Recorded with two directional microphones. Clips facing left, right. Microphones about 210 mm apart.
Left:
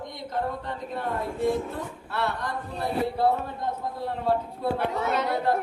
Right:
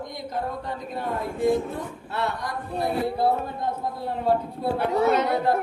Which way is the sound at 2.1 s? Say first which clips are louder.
Right 1 dB; 10° right (ahead or behind).